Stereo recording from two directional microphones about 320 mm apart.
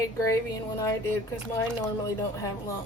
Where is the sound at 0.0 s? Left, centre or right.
Centre.